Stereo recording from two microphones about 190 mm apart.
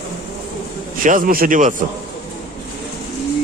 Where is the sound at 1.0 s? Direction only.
45° right (ahead or behind).